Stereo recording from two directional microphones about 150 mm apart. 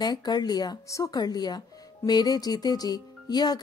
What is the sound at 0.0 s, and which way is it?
Speech, 30° left (ahead or behind).